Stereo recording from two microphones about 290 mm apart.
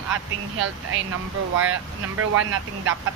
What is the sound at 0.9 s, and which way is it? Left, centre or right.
Speech, right.